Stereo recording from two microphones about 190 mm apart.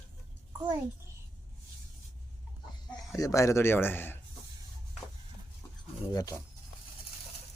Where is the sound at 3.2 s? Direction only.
15° left (ahead or behind).